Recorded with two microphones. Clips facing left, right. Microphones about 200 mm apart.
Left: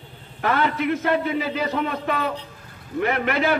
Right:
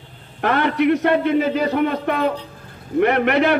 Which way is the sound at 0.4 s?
60° right (ahead or behind).